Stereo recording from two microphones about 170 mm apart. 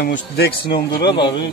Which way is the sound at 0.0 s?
65° left (ahead or behind).